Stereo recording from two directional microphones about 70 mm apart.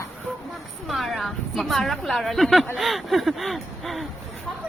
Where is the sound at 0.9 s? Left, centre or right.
Centre.